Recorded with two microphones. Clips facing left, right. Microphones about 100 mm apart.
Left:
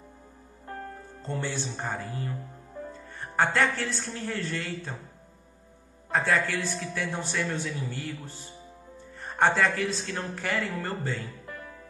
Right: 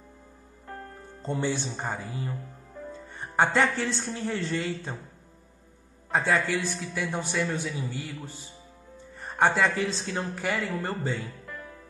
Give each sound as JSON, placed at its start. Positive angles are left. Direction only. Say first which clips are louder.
{"t": 1.2, "sound": "a man's voice", "louder": "right 4 dB", "side_deg": -15}
{"t": 6.1, "sound": "a man's voice", "louder": "right 1 dB", "side_deg": -15}
{"t": 9.2, "sound": "music", "louder": "right 1 dB", "side_deg": 0}
{"t": 9.6, "sound": "a man's voice", "louder": "right 1 dB", "side_deg": -20}